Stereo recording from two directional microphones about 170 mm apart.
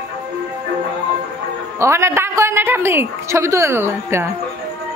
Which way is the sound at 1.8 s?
15° right (ahead or behind).